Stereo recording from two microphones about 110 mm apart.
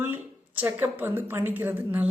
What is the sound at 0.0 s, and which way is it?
Speech, 15° right (ahead or behind).